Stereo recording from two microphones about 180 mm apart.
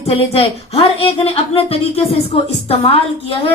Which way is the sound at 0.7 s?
30° left (ahead or behind).